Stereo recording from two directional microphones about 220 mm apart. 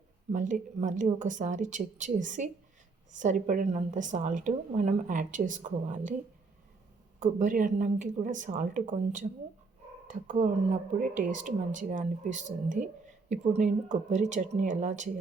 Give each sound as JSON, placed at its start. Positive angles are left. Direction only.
{"t": 0.3, "sound": "speech", "side_deg": -35}
{"t": 7.2, "sound": "speech", "side_deg": -35}